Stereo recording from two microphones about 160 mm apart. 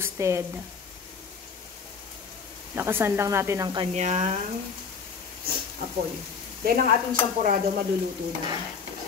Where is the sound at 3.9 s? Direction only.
45° right (ahead or behind).